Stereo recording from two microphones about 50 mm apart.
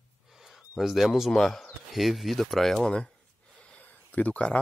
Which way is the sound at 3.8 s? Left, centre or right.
Left.